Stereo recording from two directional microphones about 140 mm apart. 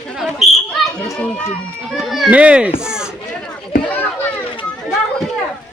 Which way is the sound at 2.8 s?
5° right (ahead or behind).